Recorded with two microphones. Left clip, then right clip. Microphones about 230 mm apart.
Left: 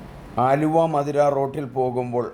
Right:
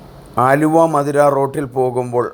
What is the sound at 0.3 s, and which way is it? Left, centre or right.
Speech, centre.